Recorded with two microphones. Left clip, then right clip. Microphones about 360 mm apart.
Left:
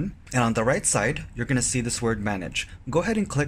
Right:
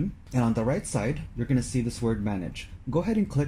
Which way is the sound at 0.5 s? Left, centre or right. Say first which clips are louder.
Left 4 dB; left.